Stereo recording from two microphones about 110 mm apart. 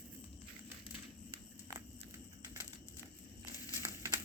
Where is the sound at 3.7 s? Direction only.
25° right (ahead or behind).